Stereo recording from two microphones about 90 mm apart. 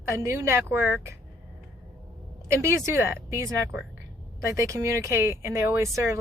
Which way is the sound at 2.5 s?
30° right (ahead or behind).